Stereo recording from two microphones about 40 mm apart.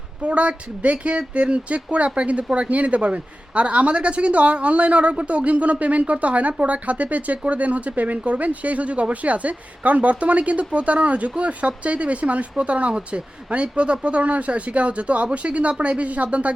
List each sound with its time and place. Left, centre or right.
0.2 s speech: right